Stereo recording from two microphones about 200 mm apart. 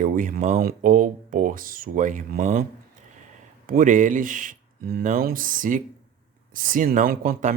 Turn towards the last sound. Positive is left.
turn(degrees=-45)  # may be behind; listen again after turning